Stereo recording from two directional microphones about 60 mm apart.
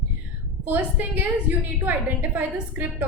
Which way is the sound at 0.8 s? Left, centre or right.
Right.